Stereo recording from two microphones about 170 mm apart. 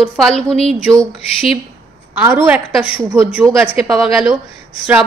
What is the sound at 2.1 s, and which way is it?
A woman's voice, 10° right (ahead or behind).